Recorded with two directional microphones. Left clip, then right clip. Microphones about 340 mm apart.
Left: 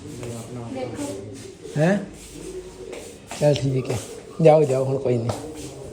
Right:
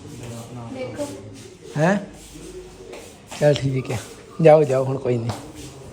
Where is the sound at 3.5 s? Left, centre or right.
Centre.